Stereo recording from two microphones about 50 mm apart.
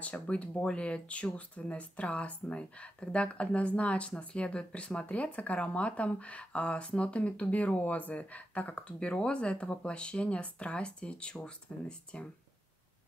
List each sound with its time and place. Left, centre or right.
0.0 s speech: left